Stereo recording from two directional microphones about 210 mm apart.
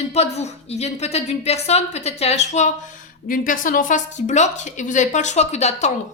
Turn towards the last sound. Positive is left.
turn(degrees=30)  # may be behind; listen again after turning